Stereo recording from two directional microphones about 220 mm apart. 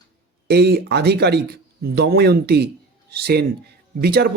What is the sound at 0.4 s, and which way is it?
Speech, 45° right (ahead or behind).